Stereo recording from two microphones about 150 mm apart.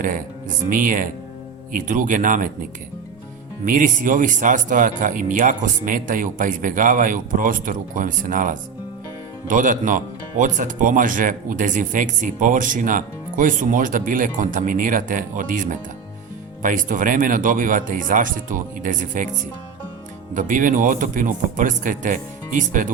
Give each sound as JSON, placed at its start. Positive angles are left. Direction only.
{"t": 0.7, "sound": "speech", "side_deg": -65}
{"t": 3.7, "sound": "speech", "side_deg": -65}
{"t": 20.3, "sound": "speech", "side_deg": -60}